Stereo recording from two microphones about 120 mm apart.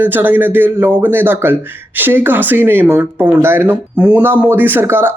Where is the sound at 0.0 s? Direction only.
15° right (ahead or behind).